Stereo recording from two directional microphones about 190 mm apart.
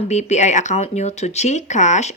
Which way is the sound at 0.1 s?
35° left (ahead or behind).